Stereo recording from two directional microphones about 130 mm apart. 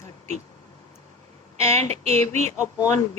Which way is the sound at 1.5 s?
20° left (ahead or behind).